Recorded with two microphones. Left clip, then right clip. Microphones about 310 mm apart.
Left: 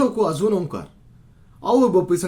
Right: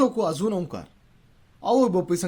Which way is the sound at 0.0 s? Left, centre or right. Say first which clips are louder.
Left 3 dB; right.